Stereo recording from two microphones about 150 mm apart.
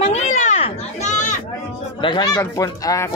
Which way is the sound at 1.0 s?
55° left (ahead or behind).